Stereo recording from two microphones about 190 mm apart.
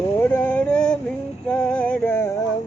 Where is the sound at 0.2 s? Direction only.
10° left (ahead or behind).